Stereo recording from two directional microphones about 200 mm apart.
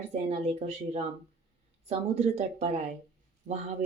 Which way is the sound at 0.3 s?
30° right (ahead or behind).